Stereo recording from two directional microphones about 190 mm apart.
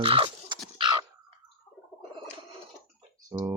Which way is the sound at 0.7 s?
25° right (ahead or behind).